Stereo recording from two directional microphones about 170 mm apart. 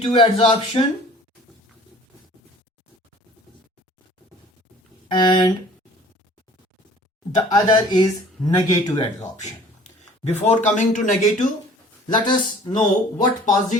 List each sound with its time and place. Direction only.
0.0 s speech: 30° left (ahead or behind)
5.1 s speech: 25° left (ahead or behind)
7.3 s speech: 25° left (ahead or behind)
9.4 s speech: 40° left (ahead or behind)
12.0 s speech: 25° left (ahead or behind)
13.1 s speech: 50° left (ahead or behind)